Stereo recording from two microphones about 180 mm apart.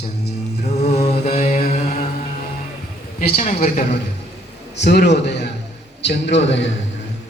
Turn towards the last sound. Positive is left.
turn(degrees=75)  # may be behind; listen again after turning